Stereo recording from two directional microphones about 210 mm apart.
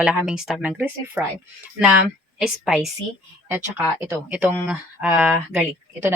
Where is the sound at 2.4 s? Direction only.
Centre (ahead or behind).